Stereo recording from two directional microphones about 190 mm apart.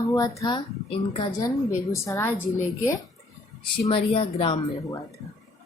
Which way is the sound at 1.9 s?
15° left (ahead or behind).